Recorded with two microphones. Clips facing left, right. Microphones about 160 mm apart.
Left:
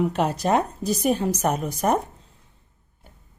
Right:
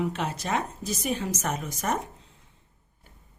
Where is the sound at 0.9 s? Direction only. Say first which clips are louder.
Left 8 dB; 60° left (ahead or behind).